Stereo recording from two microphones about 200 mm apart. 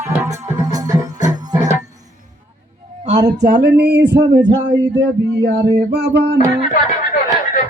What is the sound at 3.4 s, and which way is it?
Music, 50° right (ahead or behind).